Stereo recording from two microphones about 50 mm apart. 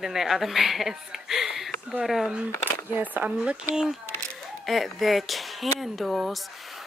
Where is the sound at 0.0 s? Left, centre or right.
Centre.